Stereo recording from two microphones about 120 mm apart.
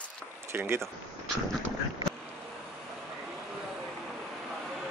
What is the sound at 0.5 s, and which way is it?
Speech, 20° right (ahead or behind).